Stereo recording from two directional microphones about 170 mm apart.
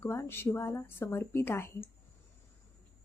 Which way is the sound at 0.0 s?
15° left (ahead or behind).